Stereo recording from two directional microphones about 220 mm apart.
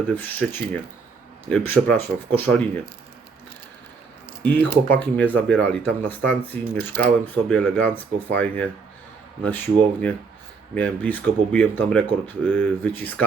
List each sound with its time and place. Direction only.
0.1 s speech: 10° left (ahead or behind)
4.5 s speech: 50° right (ahead or behind)
4.9 s speech: 5° left (ahead or behind)